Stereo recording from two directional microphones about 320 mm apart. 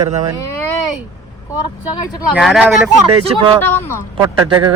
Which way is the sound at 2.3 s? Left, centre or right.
Centre.